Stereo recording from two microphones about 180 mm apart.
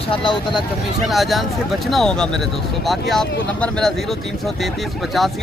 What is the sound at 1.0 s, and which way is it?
Speech, centre (ahead or behind).